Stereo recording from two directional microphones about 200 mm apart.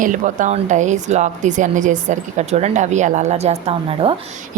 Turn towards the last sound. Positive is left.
turn(degrees=-30)  # may be behind; listen again after turning